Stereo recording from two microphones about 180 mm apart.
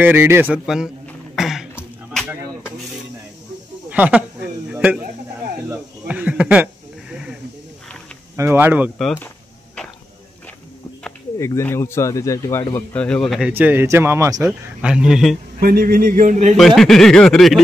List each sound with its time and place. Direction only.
0.0 s a man's voice: 10° right (ahead or behind)
1.3 s throat clearing: centre (ahead or behind)
3.9 s a man's voice: 10° right (ahead or behind)
5.7 s a sound: 5° right (ahead or behind)
8.4 s a man's voice: 10° right (ahead or behind)
8.9 s speech: centre (ahead or behind)
11.3 s a man's voice: 15° left (ahead or behind)
13.5 s a man's voice: 10° right (ahead or behind)
15.6 s speech: 55° right (ahead or behind)
16.5 s speech: centre (ahead or behind)